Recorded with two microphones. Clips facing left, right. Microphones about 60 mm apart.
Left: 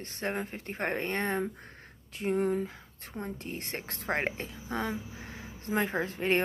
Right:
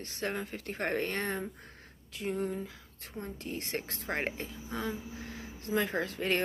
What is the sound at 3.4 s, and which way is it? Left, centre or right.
Speech, left.